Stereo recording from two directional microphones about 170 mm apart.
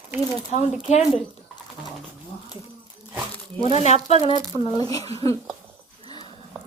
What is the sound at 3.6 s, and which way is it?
Speech, 40° left (ahead or behind).